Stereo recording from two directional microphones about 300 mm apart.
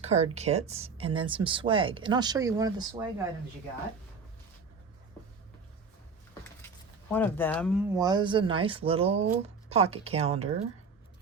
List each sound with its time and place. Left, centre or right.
0.0 s speech: right
7.1 s speech: centre
7.9 s speech: centre